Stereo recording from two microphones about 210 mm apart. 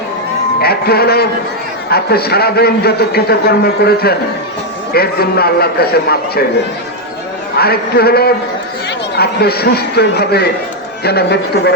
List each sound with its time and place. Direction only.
0.6 s a man's voice: 50° left (ahead or behind)
7.6 s a man's voice: 50° left (ahead or behind)